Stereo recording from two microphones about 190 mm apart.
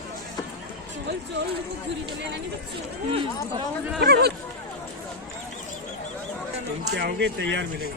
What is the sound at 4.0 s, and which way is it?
Speech, 60° right (ahead or behind).